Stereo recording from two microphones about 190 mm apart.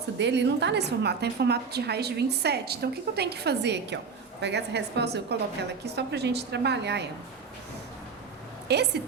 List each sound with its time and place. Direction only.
0.2 s a woman's voice: 65° right (ahead or behind)
8.6 s a woman's voice: 60° right (ahead or behind)